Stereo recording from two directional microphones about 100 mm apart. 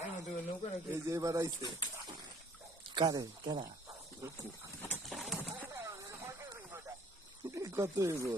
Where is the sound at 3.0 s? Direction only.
45° right (ahead or behind).